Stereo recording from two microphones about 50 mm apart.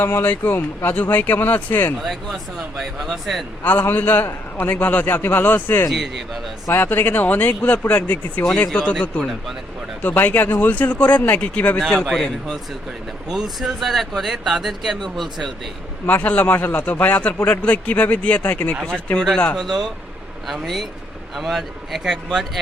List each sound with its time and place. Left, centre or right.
0.0 s speech: left
2.0 s speech: centre
3.6 s speech: left
6.7 s speech: left
8.5 s speech: left
11.8 s a man's voice: centre
12.0 s speech: centre
13.3 s speech: centre
16.0 s speech: left
18.4 s speech: left
18.9 s speech: left
19.5 s a man's voice: centre